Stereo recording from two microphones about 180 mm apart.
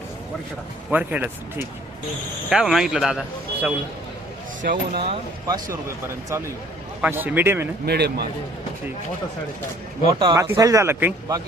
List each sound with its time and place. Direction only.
0.9 s speech: 10° right (ahead or behind)
4.6 s speech: 50° right (ahead or behind)
5.5 s speech: 20° right (ahead or behind)
7.0 s speech: 10° right (ahead or behind)
7.9 s a man's voice: 65° right (ahead or behind)
10.2 s speech: 25° right (ahead or behind)